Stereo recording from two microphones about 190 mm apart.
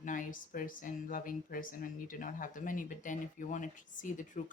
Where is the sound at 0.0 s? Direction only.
45° left (ahead or behind).